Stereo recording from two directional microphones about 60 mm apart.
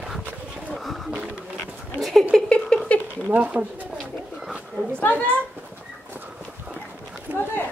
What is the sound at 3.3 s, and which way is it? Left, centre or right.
Speech, right.